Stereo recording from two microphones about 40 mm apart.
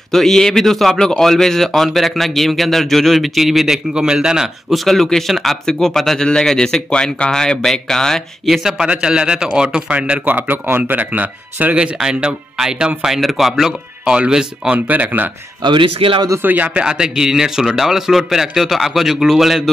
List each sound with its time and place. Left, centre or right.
0.1 s speech: centre
3.9 s a man's voice: right
4.6 s speech: centre
6.2 s a man's voice: left
8.5 s a man's voice: centre
8.8 s a man's voice: right
10.2 s speech: right
10.8 s speech: right
12.0 s a man's voice: centre
14.0 s speech: right
14.7 s speech: right
16.4 s speech: right
16.7 s a man's voice: right; by 19.6 s centre